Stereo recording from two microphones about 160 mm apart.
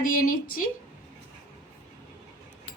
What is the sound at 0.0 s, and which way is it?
Speech, 60° left (ahead or behind).